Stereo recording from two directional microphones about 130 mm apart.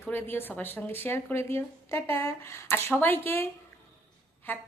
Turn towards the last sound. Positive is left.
turn(degrees=15)  # may be behind; listen again after turning